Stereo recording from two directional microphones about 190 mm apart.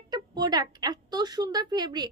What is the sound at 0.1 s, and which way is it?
A woman's voice, 20° right (ahead or behind).